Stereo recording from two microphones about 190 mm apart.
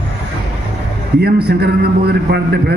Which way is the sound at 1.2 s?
60° right (ahead or behind).